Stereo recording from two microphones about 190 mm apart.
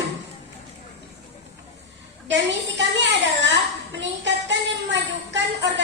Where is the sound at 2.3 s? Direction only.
70° right (ahead or behind).